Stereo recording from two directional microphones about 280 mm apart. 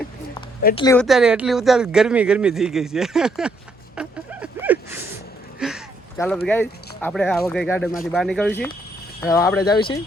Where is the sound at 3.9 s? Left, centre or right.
Centre.